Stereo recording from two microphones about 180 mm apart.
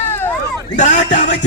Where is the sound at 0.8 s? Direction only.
45° left (ahead or behind).